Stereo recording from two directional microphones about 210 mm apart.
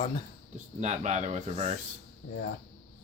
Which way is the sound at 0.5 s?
35° right (ahead or behind).